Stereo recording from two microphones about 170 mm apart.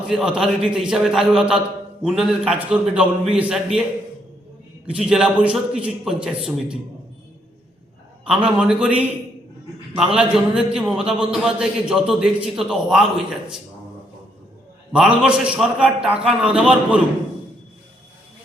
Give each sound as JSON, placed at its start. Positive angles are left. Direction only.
{"t": 0.1, "sound": "a man's voice", "side_deg": -5}
{"t": 4.9, "sound": "a man's voice", "side_deg": -5}
{"t": 8.4, "sound": "a man's voice", "side_deg": -5}
{"t": 10.1, "sound": "a man's voice", "side_deg": -5}
{"t": 14.9, "sound": "a man's voice", "side_deg": -5}